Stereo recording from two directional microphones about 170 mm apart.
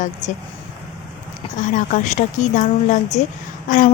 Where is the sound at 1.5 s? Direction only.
50° left (ahead or behind).